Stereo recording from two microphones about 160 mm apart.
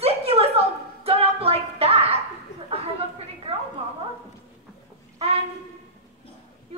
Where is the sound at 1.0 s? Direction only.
40° right (ahead or behind).